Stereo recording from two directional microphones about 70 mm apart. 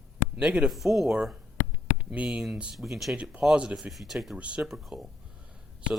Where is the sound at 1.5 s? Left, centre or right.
Centre.